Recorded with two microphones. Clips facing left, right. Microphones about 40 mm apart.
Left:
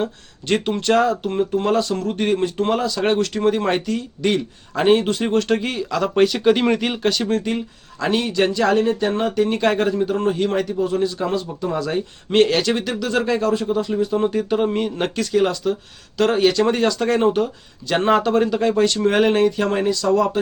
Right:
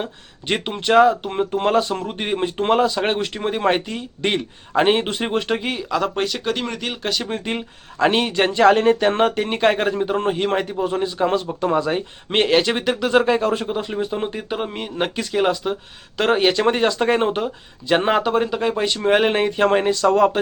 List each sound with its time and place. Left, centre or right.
0.0 s speech: right
5.5 s speech: centre
7.3 s speech: centre
7.5 s speech: right